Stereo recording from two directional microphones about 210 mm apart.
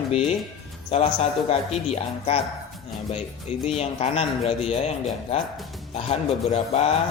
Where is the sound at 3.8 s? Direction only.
30° left (ahead or behind).